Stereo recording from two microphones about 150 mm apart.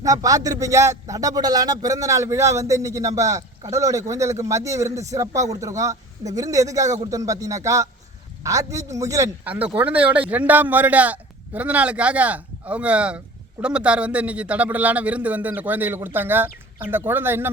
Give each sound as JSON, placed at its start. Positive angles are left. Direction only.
{"t": 0.0, "sound": "a man's voice", "side_deg": -25}
{"t": 9.4, "sound": "a man's voice", "side_deg": -10}